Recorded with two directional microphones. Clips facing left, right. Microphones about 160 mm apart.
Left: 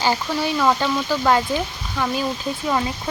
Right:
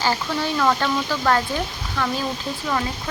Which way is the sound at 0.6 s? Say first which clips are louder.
Left 1 dB; 15° left (ahead or behind).